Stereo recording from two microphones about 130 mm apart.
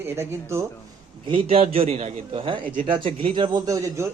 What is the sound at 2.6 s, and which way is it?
Speech, 90° right.